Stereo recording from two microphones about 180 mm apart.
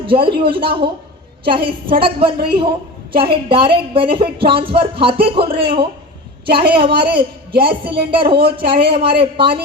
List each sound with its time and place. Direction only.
0.0 s a woman's voice: 30° right (ahead or behind)